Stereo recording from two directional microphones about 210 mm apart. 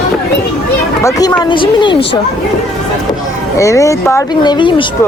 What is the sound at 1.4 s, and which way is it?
Speech, 25° left (ahead or behind).